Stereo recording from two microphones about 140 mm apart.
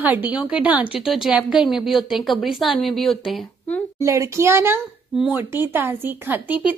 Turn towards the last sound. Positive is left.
turn(degrees=-10)  # may be behind; listen again after turning